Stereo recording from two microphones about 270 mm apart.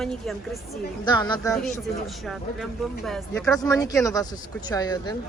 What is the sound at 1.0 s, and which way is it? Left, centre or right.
Speech, centre.